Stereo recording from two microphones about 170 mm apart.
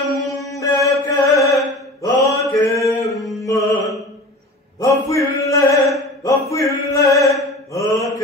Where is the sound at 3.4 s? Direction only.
20° left (ahead or behind).